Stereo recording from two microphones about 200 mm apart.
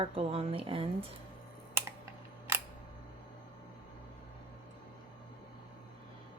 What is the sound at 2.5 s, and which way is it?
Camera, 15° right (ahead or behind).